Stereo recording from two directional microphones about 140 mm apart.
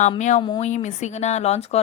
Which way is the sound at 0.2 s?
60° left (ahead or behind).